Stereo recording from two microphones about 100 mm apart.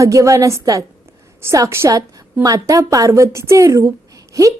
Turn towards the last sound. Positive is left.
turn(degrees=-35)  # may be behind; listen again after turning